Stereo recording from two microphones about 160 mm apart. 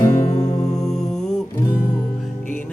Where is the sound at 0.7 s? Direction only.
5° left (ahead or behind).